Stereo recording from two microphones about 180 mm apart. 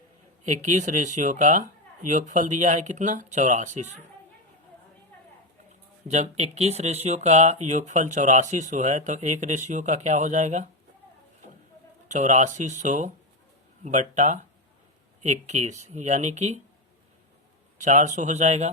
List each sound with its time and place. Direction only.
0.4 s speech: 45° right (ahead or behind)
6.1 s speech: 40° right (ahead or behind)
12.0 s speech: 40° right (ahead or behind)
17.7 s speech: 45° right (ahead or behind)